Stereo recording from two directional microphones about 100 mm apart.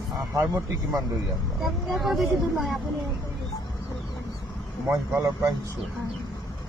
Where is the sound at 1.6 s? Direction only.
Centre (ahead or behind).